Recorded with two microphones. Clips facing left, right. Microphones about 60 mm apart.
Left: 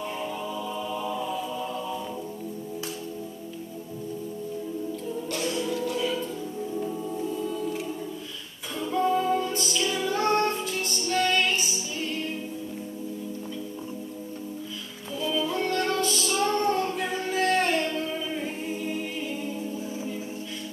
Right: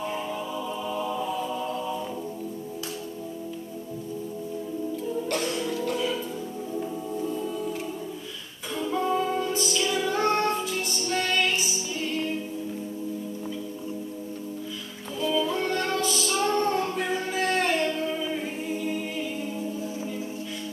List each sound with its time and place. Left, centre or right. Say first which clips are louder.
0.9 s music: right 2 dB; centre
5.3 s music: even; right
5.6 s music: even; centre
8.7 s music: left 1 dB; centre
15.2 s music: right 2 dB; centre
16.9 s singing: even; centre